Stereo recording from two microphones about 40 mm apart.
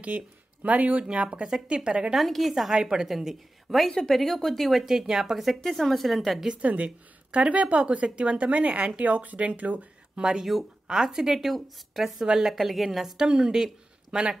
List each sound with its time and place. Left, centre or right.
0.1 s speech: right
2.1 s a woman's voice: centre
2.7 s a woman's voice: centre
4.1 s speech: centre
4.8 s speech: centre
5.5 s a woman's voice: centre
6.6 s speech: right
10.2 s speech: centre
12.2 s speech: centre
12.5 s a woman's voice: centre
13.2 s speech: centre